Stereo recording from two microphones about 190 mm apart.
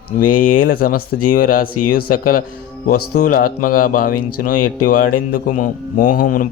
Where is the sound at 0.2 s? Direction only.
45° left (ahead or behind).